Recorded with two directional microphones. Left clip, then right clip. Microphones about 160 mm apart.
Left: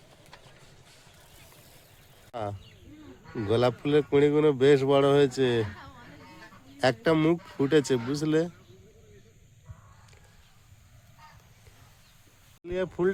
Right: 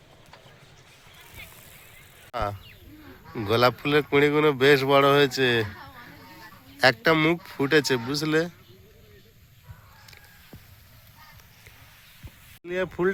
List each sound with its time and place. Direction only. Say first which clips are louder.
2.3 s speech: right 6 dB; 10° left (ahead or behind)
3.5 s speech: right 3 dB; 15° left (ahead or behind)
6.7 s a man's voice: right 4 dB; 20° left (ahead or behind)
12.6 s speech: right 2 dB; centre (ahead or behind)